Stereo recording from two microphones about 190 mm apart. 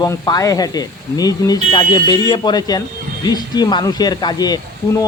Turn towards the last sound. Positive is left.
turn(degrees=20)  # may be behind; listen again after turning